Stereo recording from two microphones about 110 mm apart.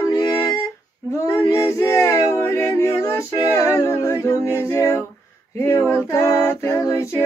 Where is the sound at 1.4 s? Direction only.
25° left (ahead or behind).